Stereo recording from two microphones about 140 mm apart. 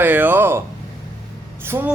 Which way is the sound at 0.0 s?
15° right (ahead or behind).